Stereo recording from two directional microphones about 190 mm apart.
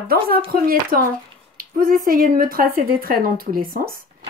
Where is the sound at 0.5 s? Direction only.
50° right (ahead or behind).